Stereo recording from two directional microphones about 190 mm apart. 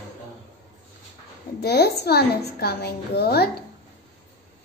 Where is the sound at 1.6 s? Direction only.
60° left (ahead or behind).